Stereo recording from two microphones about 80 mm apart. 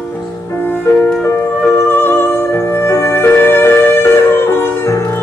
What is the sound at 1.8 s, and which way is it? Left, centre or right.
Music, left.